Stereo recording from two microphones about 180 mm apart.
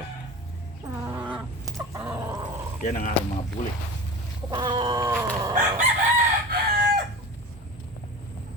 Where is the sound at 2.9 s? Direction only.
45° left (ahead or behind).